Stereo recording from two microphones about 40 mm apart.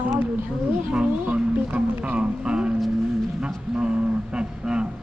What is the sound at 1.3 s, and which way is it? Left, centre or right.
Speech, right.